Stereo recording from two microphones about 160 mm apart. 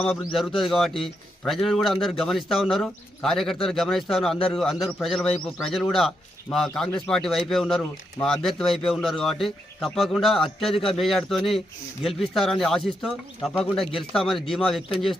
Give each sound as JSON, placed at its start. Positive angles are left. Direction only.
{"t": 0.3, "sound": "a man's voice", "side_deg": 0}